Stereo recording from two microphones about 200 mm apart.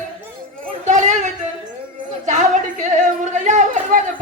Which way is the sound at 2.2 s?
35° right (ahead or behind).